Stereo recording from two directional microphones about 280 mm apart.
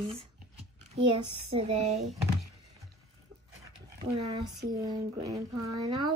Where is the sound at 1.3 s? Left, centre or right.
Right.